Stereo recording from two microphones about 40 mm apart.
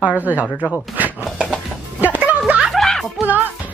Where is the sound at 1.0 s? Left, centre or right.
Right.